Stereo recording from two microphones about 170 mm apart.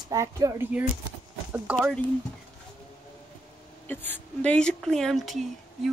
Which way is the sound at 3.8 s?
10° left (ahead or behind).